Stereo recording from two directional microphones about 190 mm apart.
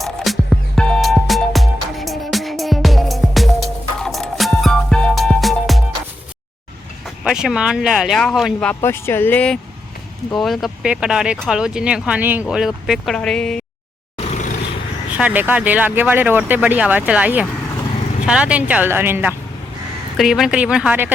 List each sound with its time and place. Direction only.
0.0 s music: centre (ahead or behind)
7.3 s speech: 5° right (ahead or behind)
8.8 s speech: 15° left (ahead or behind)
14.2 s vehicle: 40° left (ahead or behind)
15.1 s speech: 10° right (ahead or behind)